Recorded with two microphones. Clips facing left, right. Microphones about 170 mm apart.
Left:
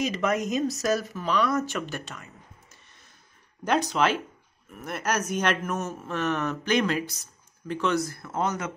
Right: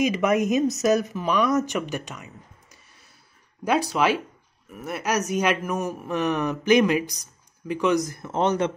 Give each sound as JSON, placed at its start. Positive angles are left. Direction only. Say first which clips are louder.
{"t": 0.0, "sound": "speech", "louder": "right 5 dB", "side_deg": -20}
{"t": 3.6, "sound": "speech", "louder": "right 2 dB", "side_deg": -5}